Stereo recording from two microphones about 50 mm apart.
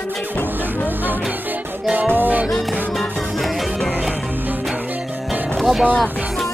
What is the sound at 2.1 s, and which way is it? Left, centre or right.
Music, right.